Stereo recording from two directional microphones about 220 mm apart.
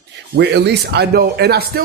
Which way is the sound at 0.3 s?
50° right (ahead or behind).